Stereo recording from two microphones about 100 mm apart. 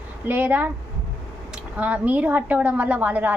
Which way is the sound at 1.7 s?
15° right (ahead or behind).